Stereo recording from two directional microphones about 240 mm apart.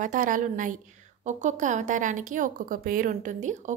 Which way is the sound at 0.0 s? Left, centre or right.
Right.